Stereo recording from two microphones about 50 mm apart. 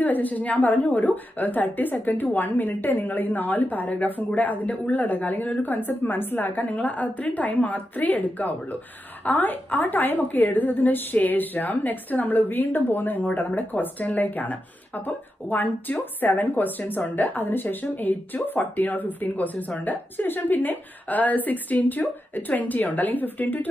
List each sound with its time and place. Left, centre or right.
0.0 s a woman's voice: left